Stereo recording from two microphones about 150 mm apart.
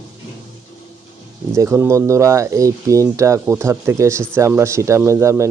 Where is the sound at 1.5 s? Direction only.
15° right (ahead or behind).